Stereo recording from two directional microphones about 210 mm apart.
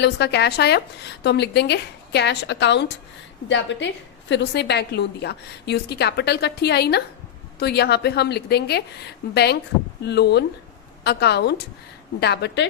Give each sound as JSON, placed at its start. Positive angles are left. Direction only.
{"t": 0.0, "sound": "a woman's voice", "side_deg": 50}